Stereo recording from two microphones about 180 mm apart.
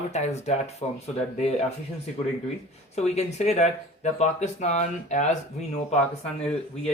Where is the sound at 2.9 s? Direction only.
35° left (ahead or behind).